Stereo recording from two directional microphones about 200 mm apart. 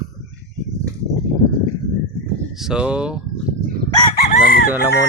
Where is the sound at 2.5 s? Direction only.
5° right (ahead or behind).